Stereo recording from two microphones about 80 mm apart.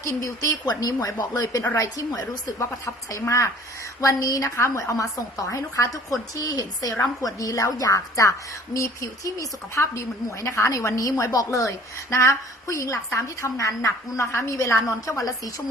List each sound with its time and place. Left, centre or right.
0.6 s a woman's voice: left